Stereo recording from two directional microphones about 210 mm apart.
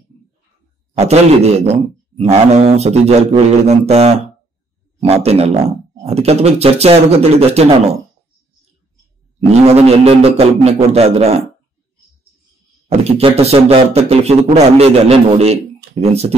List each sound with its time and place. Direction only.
0.9 s speech: 30° right (ahead or behind)
9.5 s speech: 30° right (ahead or behind)
12.8 s speech: 30° right (ahead or behind)